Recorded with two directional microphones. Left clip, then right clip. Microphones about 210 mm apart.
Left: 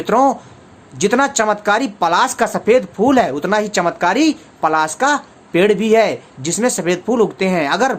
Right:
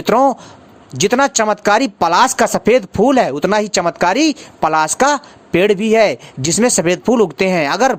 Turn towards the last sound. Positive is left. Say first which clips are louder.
# right 2 dB
turn(degrees=-40)  # may be behind; listen again after turning